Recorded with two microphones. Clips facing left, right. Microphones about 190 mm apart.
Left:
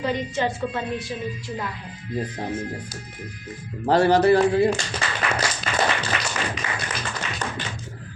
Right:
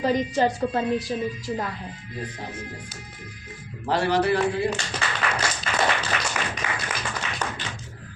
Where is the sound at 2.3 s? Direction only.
40° left (ahead or behind).